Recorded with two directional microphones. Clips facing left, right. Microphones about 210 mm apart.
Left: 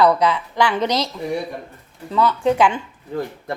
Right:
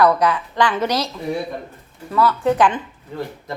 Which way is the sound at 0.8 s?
10° right (ahead or behind).